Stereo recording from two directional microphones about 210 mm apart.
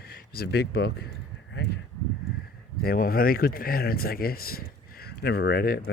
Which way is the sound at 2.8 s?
45° left (ahead or behind).